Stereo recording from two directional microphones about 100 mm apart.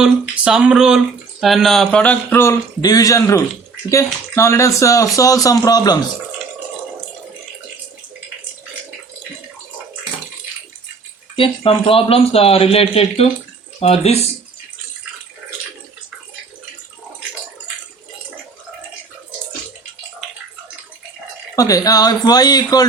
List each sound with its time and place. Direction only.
0.0 s speech: 10° right (ahead or behind); by 2.1 s 10° left (ahead or behind)
2.3 s speech: 25° left (ahead or behind)
2.8 s speech: 35° left (ahead or behind)
11.3 s speech: 60° left (ahead or behind); by 14.3 s 90° left
21.5 s speech: 35° left (ahead or behind)